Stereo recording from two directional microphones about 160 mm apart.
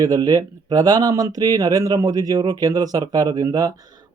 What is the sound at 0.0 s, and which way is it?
Speech, 20° right (ahead or behind).